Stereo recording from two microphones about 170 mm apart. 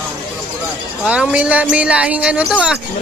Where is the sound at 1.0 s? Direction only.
5° right (ahead or behind).